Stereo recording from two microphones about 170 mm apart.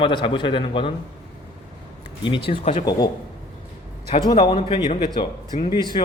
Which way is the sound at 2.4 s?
35° left (ahead or behind).